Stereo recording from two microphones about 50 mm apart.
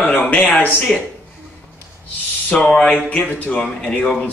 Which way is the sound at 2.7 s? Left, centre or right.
Centre.